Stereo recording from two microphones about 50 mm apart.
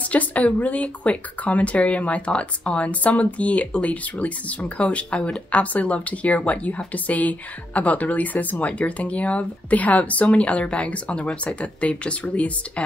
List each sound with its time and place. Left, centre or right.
0.1 s speech: left